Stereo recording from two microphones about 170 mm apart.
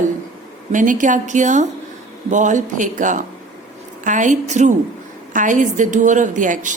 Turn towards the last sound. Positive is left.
turn(degrees=-50)  # may be behind; listen again after turning